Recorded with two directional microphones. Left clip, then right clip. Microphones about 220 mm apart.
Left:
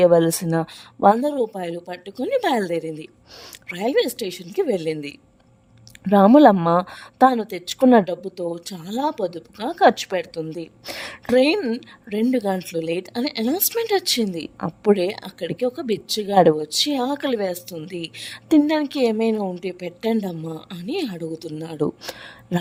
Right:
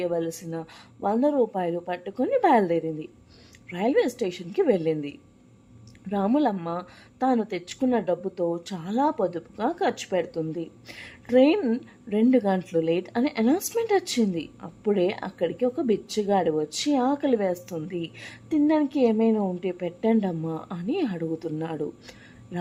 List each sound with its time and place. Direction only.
0.0 s a woman's voice: 55° left (ahead or behind)
20.2 s speech: centre (ahead or behind)
20.7 s a woman's voice: 55° left (ahead or behind)